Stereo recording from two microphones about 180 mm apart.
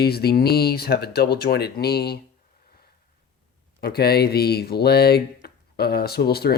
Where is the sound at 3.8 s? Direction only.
60° left (ahead or behind).